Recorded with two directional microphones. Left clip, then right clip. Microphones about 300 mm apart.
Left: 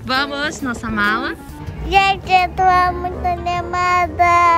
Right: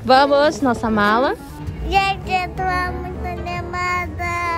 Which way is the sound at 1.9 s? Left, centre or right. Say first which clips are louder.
Left 4 dB; centre.